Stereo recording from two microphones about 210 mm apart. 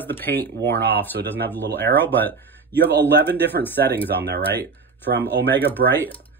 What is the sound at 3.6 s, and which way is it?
Speech, 10° left (ahead or behind).